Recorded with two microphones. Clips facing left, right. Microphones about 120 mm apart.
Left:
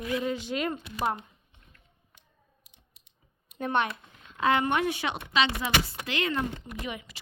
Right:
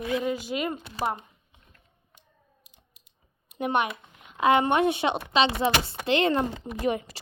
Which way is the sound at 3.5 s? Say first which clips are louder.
Right 2 dB; 15° right (ahead or behind).